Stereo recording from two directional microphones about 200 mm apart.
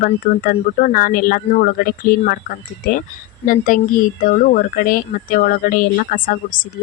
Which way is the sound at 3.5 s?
45° left (ahead or behind).